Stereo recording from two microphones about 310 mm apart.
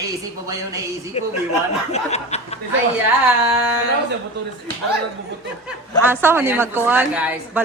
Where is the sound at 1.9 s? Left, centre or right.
Left.